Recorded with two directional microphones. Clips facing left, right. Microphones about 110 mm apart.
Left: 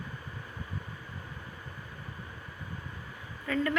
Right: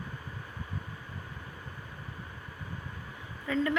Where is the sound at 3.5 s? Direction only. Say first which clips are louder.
Right 1 dB; 15° right (ahead or behind).